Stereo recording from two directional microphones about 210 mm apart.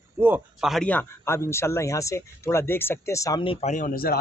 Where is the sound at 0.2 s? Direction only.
5° right (ahead or behind).